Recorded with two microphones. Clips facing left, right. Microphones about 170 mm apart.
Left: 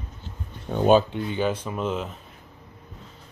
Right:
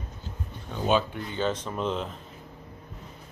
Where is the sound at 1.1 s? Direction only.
25° left (ahead or behind).